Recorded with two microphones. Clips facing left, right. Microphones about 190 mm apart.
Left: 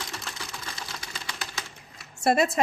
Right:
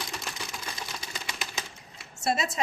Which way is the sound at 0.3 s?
15° right (ahead or behind).